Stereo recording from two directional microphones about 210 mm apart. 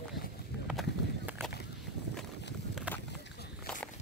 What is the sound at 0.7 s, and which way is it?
Run, 5° right (ahead or behind).